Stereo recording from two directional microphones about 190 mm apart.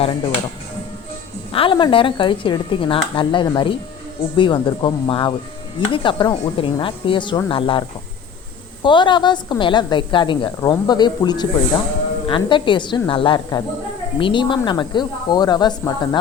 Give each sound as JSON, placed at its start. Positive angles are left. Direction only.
{"t": 0.0, "sound": "speech", "side_deg": 30}
{"t": 1.5, "sound": "a woman's voice", "side_deg": 25}